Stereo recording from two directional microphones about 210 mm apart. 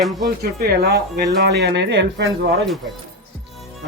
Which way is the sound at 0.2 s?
50° right (ahead or behind).